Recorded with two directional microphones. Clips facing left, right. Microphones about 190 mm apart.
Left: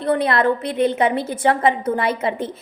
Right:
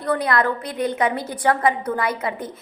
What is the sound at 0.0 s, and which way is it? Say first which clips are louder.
A woman's voice: left 3 dB; 25° left (ahead or behind).